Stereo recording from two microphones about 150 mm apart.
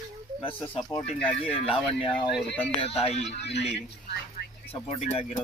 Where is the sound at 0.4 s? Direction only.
35° left (ahead or behind).